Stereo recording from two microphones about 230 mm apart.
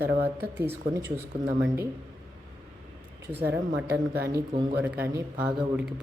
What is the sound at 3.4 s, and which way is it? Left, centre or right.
Speech, right.